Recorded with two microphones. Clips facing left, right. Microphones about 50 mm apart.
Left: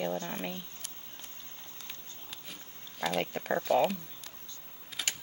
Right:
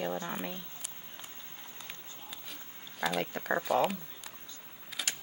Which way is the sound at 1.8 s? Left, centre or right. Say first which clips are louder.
Right 1 dB; centre.